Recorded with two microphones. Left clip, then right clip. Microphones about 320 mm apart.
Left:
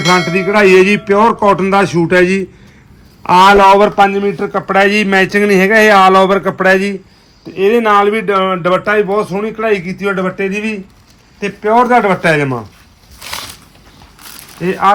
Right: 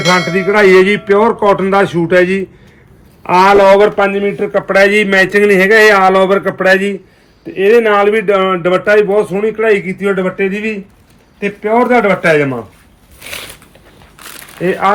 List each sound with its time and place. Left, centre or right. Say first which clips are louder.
0.0 s music: even; centre
0.9 s a man's voice: even; centre
14.6 s a man's voice: left 1 dB; centre